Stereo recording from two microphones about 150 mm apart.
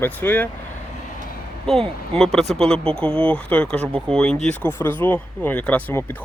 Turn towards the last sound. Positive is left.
turn(degrees=10)  # may be behind; listen again after turning